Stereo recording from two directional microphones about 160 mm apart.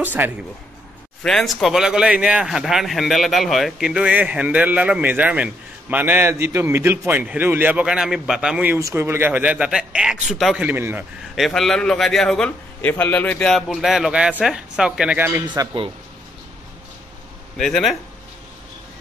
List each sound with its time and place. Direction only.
0.0 s speech: 10° right (ahead or behind)
1.2 s speech: centre (ahead or behind)
11.3 s a man's voice: centre (ahead or behind)
15.4 s a man's voice: 25° right (ahead or behind)
17.6 s a man's voice: 5° left (ahead or behind)